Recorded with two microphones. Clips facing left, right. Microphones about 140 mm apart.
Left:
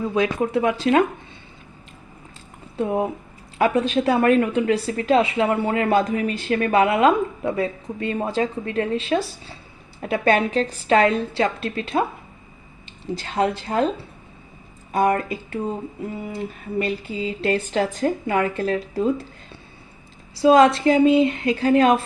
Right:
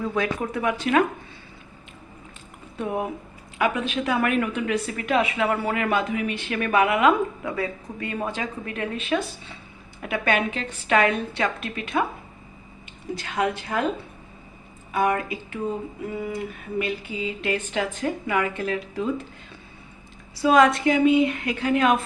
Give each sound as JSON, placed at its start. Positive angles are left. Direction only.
{"t": 0.0, "sound": "speech", "side_deg": 20}
{"t": 2.7, "sound": "speech", "side_deg": 25}
{"t": 3.6, "sound": "a woman's voice", "side_deg": 35}
{"t": 13.1, "sound": "a woman's voice", "side_deg": 30}
{"t": 14.9, "sound": "a woman's voice", "side_deg": 40}
{"t": 16.0, "sound": "a woman's voice", "side_deg": 30}
{"t": 20.3, "sound": "a woman's voice", "side_deg": 25}